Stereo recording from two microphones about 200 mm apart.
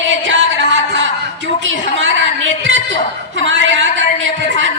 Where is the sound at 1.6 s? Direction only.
70° right (ahead or behind).